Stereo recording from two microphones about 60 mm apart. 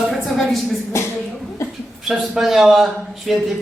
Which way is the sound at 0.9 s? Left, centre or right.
Left.